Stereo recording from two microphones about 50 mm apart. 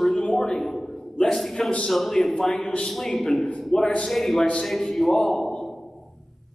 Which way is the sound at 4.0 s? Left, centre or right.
Centre.